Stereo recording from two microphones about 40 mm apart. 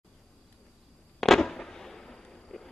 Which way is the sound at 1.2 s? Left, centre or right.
Centre.